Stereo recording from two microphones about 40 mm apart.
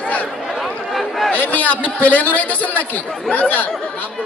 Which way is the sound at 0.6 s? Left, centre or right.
Centre.